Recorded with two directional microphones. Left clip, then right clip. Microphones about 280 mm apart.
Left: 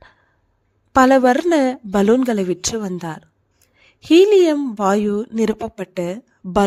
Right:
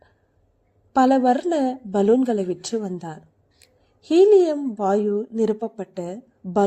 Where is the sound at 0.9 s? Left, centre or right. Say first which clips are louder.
Left 5 dB; left.